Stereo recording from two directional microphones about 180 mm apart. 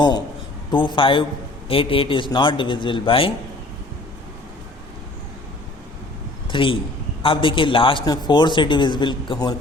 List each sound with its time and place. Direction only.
0.7 s a man's voice: 25° left (ahead or behind)
6.5 s a man's voice: 30° left (ahead or behind)